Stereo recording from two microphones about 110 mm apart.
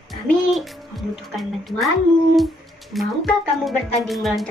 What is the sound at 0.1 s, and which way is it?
Music, centre (ahead or behind).